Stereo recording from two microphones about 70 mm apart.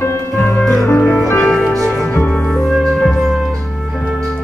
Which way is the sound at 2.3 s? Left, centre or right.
Centre.